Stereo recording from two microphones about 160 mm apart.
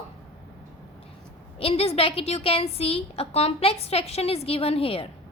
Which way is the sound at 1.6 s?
35° left (ahead or behind).